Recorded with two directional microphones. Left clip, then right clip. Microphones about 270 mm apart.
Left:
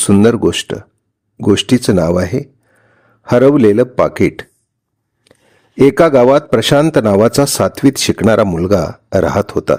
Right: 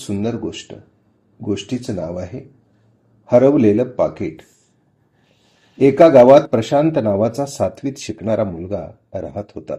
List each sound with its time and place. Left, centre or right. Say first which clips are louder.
0.2 s speech: left 12 dB; left
5.7 s speech: left 1 dB; left